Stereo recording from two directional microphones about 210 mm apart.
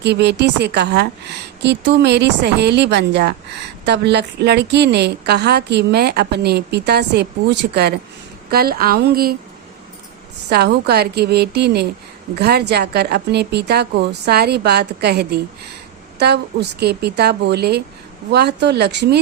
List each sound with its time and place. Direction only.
0.0 s a woman's voice: 55° right (ahead or behind)
10.5 s a woman's voice: 50° right (ahead or behind)